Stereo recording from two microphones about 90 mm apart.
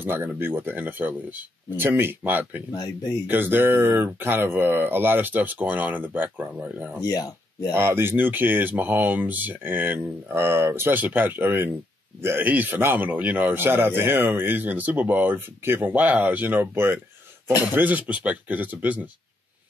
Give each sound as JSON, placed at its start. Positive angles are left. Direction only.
{"t": 0.0, "sound": "speech", "side_deg": -25}
{"t": 7.0, "sound": "speech", "side_deg": 45}
{"t": 7.7, "sound": "speech", "side_deg": -25}